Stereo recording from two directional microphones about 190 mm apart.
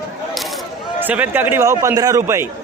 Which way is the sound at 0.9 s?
10° right (ahead or behind).